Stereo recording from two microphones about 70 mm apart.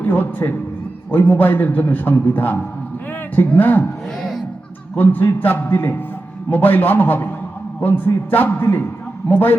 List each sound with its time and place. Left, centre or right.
0.0 s a man's voice: left
4.9 s a man's voice: left